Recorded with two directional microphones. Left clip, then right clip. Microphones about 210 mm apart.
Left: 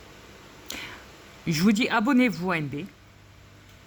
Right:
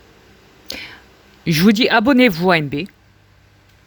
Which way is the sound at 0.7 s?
35° right (ahead or behind).